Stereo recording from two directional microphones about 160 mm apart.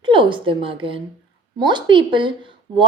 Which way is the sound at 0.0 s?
30° right (ahead or behind).